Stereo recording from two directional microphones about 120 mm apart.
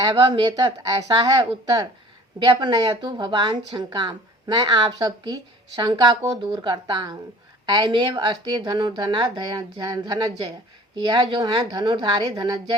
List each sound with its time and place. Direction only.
0.0 s a woman's voice: 35° right (ahead or behind)